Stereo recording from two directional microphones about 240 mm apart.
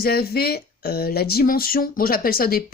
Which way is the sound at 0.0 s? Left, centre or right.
Left.